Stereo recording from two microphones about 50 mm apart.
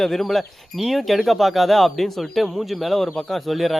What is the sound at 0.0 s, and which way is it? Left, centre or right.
Speech, centre.